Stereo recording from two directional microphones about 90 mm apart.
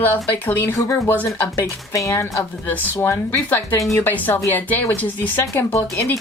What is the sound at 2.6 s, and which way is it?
Speech, 25° left (ahead or behind).